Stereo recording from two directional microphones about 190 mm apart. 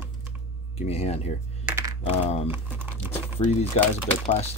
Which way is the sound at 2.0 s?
30° left (ahead or behind).